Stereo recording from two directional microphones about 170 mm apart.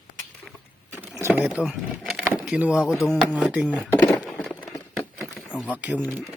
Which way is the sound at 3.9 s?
15° left (ahead or behind).